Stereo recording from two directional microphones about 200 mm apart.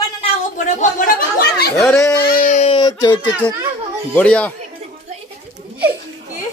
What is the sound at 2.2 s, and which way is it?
Speech, 40° left (ahead or behind).